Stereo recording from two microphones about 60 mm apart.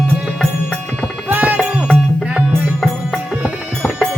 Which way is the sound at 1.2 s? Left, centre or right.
Right.